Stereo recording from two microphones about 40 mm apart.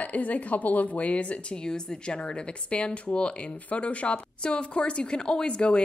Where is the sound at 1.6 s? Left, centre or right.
Centre.